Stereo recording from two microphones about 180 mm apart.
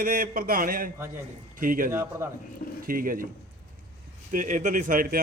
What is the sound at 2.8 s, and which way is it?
Speech, 50° right (ahead or behind).